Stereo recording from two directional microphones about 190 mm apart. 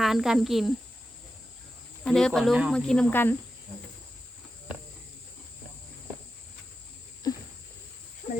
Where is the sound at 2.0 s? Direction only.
5° left (ahead or behind).